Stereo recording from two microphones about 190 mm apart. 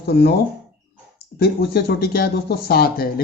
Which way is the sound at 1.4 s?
55° left (ahead or behind).